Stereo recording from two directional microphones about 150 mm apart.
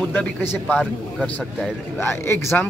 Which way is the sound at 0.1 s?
15° left (ahead or behind).